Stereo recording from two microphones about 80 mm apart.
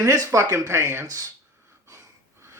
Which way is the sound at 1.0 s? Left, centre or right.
Right.